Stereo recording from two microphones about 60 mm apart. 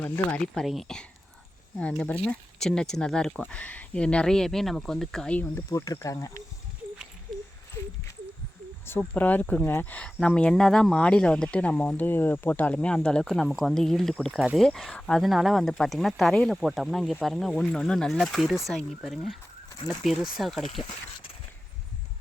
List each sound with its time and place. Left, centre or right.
0.3 s speech: centre
0.6 s speech: centre
1.8 s speech: centre
3.4 s speech: left; by 5.3 s centre
5.3 s speech: left
5.6 s speech: left
9.0 s speech: left
10.6 s speech: centre; by 12.8 s left
12.8 s speech: centre
15.2 s speech: centre